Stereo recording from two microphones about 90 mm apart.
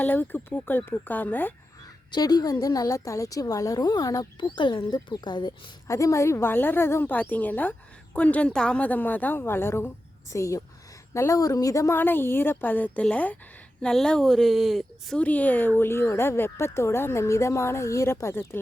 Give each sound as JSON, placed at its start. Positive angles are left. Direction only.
{"t": 0.0, "sound": "a woman's voice", "side_deg": 20}
{"t": 2.1, "sound": "a woman's voice", "side_deg": 50}
{"t": 5.9, "sound": "a woman's voice", "side_deg": 35}
{"t": 10.3, "sound": "a woman's voice", "side_deg": 35}
{"t": 11.9, "sound": "a woman's voice", "side_deg": 25}
{"t": 15.2, "sound": "a woman's voice", "side_deg": 15}